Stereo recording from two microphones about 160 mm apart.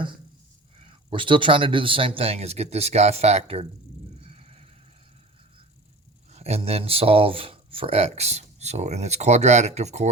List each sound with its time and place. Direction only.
0.8 s speech: 35° right (ahead or behind)
4.2 s neigh: 40° right (ahead or behind)
6.3 s speech: 40° right (ahead or behind)